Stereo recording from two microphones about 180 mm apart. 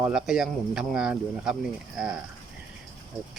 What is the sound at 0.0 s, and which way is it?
Speech, 5° right (ahead or behind).